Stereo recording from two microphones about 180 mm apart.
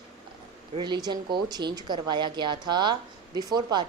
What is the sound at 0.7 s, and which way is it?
Speech, 25° right (ahead or behind).